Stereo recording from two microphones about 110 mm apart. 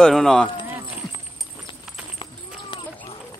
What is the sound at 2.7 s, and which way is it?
Clip-clop, 55° left (ahead or behind).